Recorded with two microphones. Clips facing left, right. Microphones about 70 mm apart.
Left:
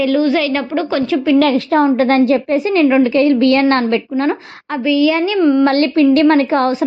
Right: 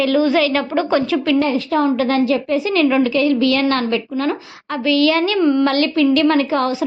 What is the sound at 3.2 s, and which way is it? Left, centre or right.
A woman's voice, left.